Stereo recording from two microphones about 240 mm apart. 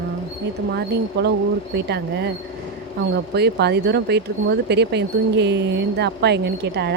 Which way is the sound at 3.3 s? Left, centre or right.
Right.